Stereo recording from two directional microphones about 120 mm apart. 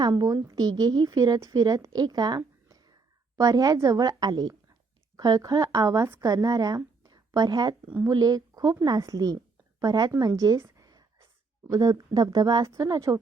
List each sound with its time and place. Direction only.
0.0 s a woman's voice: 35° right (ahead or behind)
10.8 s whispering: 30° right (ahead or behind)
11.7 s a woman's voice: 35° right (ahead or behind)